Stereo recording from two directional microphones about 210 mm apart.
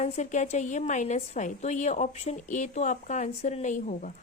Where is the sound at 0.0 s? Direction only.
35° left (ahead or behind).